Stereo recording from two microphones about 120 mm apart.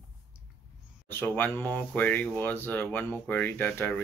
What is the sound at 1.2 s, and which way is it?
Speech, 15° left (ahead or behind).